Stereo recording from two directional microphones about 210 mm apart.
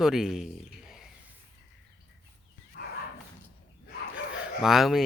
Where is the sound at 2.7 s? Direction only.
55° left (ahead or behind).